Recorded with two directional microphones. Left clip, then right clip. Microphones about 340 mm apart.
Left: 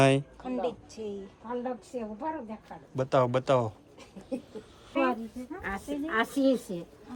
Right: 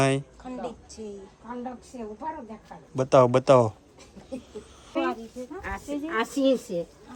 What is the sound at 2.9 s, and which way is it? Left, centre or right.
Speech, centre.